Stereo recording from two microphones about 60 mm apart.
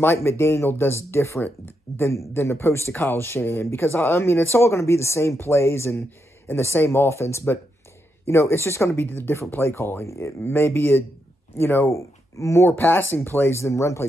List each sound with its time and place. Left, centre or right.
0.0 s speech: left
6.0 s a sound: left
6.6 s speech: left
9.0 s speech: left
9.5 s speech: left
10.5 s speech: left
11.9 s speech: left
12.7 s speech: left